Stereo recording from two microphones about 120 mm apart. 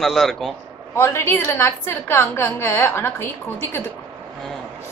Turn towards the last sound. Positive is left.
turn(degrees=20)  # may be behind; listen again after turning